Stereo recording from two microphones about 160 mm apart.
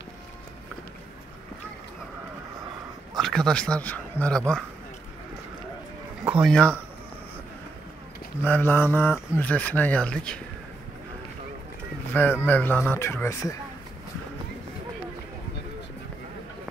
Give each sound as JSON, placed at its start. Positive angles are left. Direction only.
{"t": 3.2, "sound": "speech", "side_deg": 5}
{"t": 6.2, "sound": "a sound", "side_deg": -5}
{"t": 8.5, "sound": "speech", "side_deg": 10}
{"t": 12.1, "sound": "speech", "side_deg": 15}